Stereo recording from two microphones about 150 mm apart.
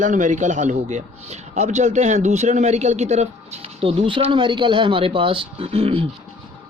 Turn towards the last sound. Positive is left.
turn(degrees=-40)  # may be behind; listen again after turning